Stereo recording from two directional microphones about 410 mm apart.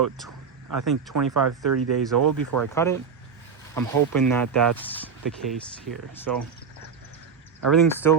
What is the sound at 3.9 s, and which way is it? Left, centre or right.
Speech, right.